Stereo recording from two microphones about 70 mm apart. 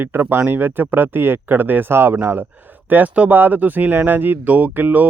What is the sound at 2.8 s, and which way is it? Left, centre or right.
Speech, right.